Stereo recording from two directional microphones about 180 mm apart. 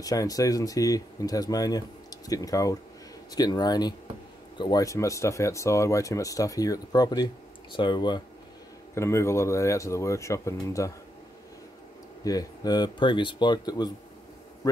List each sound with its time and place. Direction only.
0.0 s speech: 20° left (ahead or behind)
8.9 s speech: 15° left (ahead or behind)
12.3 s speech: 20° left (ahead or behind)